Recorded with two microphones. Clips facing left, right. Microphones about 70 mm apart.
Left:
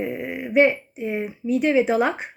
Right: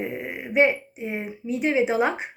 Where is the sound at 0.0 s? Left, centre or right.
Right.